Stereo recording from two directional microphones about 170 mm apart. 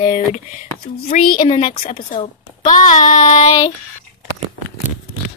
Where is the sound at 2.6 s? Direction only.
45° left (ahead or behind).